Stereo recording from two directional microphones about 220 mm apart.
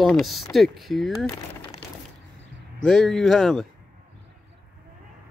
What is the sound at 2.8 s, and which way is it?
Speech, centre (ahead or behind).